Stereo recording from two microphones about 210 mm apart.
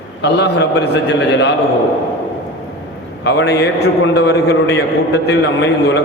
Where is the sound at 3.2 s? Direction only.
55° left (ahead or behind).